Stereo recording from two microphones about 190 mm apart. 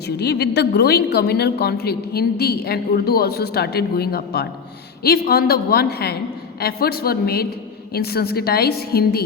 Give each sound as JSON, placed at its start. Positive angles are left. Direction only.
{"t": 0.2, "sound": "a woman's voice", "side_deg": 60}